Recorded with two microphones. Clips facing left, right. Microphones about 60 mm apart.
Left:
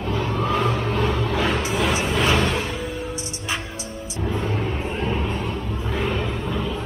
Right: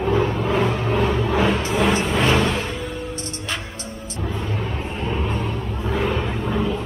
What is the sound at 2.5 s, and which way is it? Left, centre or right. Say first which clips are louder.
Music: even; centre.